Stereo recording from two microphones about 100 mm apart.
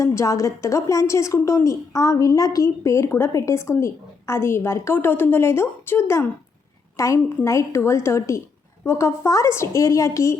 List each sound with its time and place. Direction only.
0.0 s a woman's voice: 30° left (ahead or behind)